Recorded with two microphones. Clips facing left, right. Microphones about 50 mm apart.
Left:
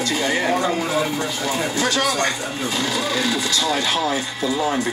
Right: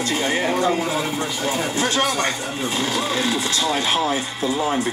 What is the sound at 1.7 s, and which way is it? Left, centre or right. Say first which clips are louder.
Speech: left 1 dB; right.